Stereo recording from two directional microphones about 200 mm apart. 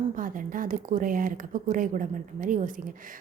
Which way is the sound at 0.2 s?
45° right (ahead or behind).